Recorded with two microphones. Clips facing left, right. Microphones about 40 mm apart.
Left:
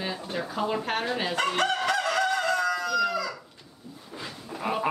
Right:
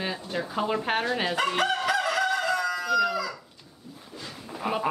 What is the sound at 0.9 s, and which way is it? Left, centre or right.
Speech, right.